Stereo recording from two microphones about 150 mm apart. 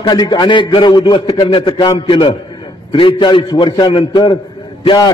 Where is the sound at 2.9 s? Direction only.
35° left (ahead or behind).